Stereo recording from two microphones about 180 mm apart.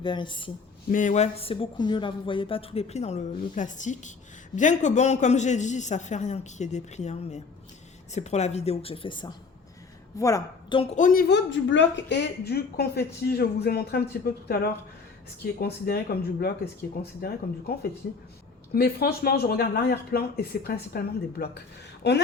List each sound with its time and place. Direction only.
0.0 s a woman's voice: 25° left (ahead or behind)
0.9 s a woman's voice: 45° left (ahead or behind); by 10.8 s 20° left (ahead or behind)
10.9 s speech: 50° left (ahead or behind); by 22.2 s 70° left (ahead or behind)